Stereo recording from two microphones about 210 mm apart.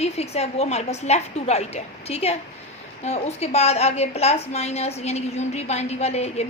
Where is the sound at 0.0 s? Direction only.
30° left (ahead or behind).